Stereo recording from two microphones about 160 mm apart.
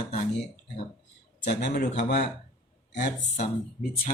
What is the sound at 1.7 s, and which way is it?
Speech, 80° left.